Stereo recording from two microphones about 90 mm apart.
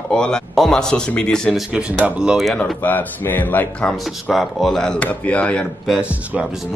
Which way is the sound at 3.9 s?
Centre (ahead or behind).